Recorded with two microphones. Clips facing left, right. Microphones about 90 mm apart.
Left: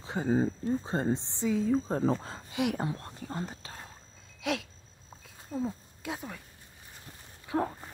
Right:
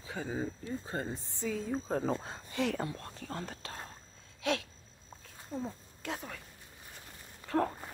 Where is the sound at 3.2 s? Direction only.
10° left (ahead or behind).